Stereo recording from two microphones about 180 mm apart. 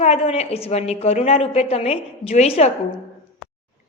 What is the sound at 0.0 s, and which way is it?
A woman's voice, 35° left (ahead or behind).